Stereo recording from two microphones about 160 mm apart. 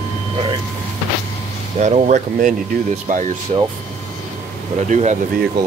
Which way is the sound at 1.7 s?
45° right (ahead or behind).